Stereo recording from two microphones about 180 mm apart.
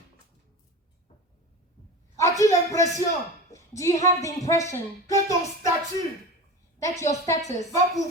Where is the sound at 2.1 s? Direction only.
15° left (ahead or behind).